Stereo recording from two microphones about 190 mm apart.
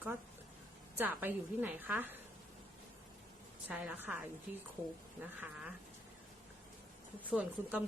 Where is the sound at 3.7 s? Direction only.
5° right (ahead or behind).